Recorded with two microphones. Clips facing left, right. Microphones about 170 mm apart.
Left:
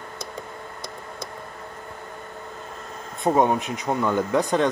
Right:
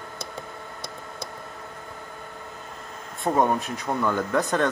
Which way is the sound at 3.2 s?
15° left (ahead or behind).